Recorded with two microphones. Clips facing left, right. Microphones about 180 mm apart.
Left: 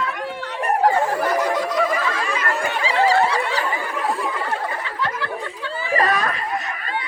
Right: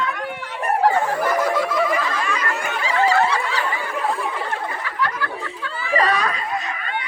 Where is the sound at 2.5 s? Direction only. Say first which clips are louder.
Left 2 dB; 30° left (ahead or behind).